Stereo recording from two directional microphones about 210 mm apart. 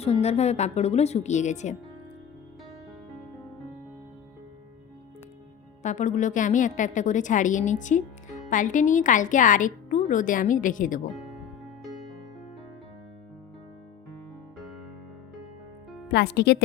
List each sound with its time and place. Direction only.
0.0 s a woman's voice: 30° left (ahead or behind)
5.8 s a woman's voice: 35° left (ahead or behind)
16.1 s speech: 50° left (ahead or behind)